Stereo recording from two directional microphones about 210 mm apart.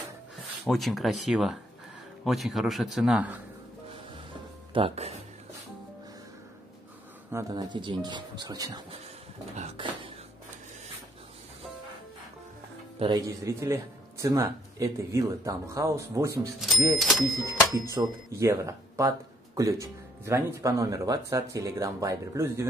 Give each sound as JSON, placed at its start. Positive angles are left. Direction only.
{"t": 0.7, "sound": "a man's voice", "side_deg": 0}
{"t": 4.7, "sound": "speech", "side_deg": -30}
{"t": 7.2, "sound": "speech", "side_deg": -15}
{"t": 13.0, "sound": "speech", "side_deg": -20}
{"t": 17.0, "sound": "a man's voice", "side_deg": 0}
{"t": 17.4, "sound": "tuning fork", "side_deg": 15}
{"t": 17.7, "sound": "speech", "side_deg": -15}